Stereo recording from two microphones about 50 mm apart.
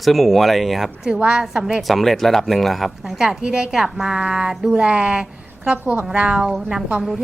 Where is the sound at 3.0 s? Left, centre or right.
Centre.